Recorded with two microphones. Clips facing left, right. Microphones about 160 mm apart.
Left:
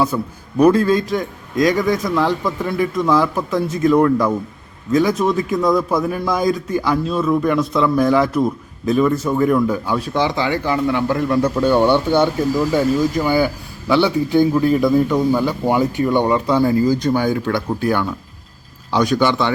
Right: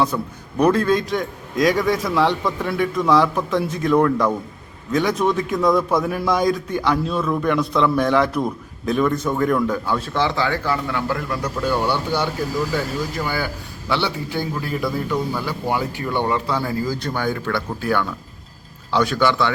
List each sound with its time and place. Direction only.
0.1 s a man's voice: 5° left (ahead or behind)